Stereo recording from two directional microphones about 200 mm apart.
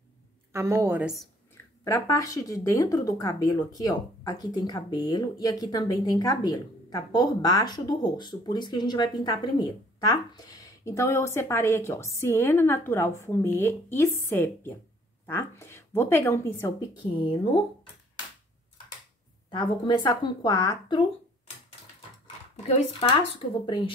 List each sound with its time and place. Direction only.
0.5 s speech: 10° right (ahead or behind)
1.9 s speech: 15° left (ahead or behind)
19.5 s speech: 20° left (ahead or behind)
22.7 s speech: 30° left (ahead or behind)